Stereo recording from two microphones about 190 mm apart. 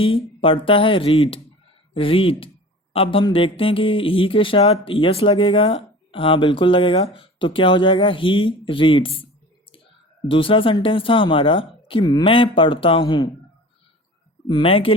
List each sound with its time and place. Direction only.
0.4 s speech: 30° left (ahead or behind)
10.2 s speech: 25° left (ahead or behind)
14.5 s speech: 30° left (ahead or behind)